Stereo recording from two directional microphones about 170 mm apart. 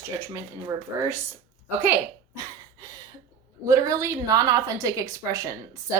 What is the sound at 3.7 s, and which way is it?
A woman's voice, 20° right (ahead or behind).